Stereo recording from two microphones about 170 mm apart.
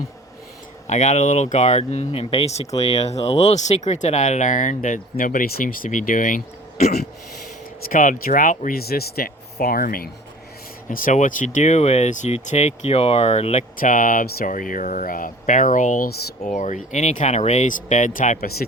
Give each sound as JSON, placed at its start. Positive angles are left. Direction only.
{"t": 0.9, "sound": "speech", "side_deg": 45}
{"t": 7.9, "sound": "speech", "side_deg": 55}
{"t": 13.7, "sound": "speech", "side_deg": 50}